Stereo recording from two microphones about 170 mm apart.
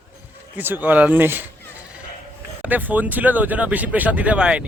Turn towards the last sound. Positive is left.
turn(degrees=-5)  # may be behind; listen again after turning